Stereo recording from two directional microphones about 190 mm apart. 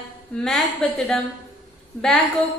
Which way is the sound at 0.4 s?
Centre (ahead or behind).